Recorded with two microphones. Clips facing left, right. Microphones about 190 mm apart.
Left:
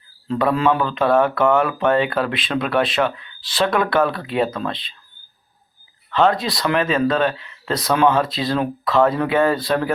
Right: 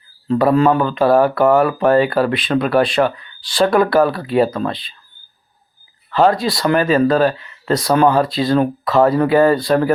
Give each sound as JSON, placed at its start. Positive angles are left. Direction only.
{"t": 0.3, "sound": "speech", "side_deg": 0}
{"t": 0.6, "sound": "speech", "side_deg": -45}
{"t": 0.9, "sound": "speech", "side_deg": 0}
{"t": 6.1, "sound": "speech", "side_deg": -5}